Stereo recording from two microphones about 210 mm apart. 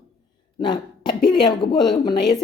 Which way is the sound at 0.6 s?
20° left (ahead or behind).